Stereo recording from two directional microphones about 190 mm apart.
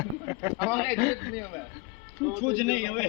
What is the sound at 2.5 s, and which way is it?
Speech, 50° right (ahead or behind).